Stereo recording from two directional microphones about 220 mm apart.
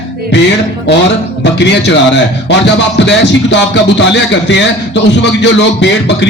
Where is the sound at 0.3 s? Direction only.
50° left (ahead or behind).